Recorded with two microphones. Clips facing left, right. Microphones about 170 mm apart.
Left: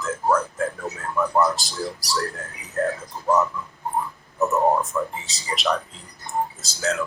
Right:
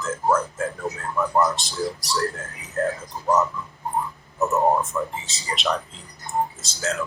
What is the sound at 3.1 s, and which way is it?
Dog, 15° right (ahead or behind).